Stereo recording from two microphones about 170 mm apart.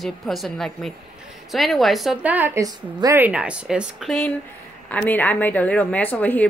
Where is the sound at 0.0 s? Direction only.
Centre (ahead or behind).